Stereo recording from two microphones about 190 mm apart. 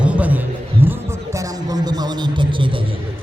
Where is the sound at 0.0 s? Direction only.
10° right (ahead or behind); by 2.8 s 25° right (ahead or behind).